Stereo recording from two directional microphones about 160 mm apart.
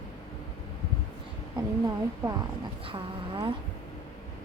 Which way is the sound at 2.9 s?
30° right (ahead or behind).